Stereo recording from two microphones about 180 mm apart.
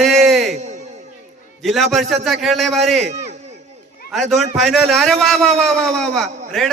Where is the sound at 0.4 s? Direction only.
40° right (ahead or behind).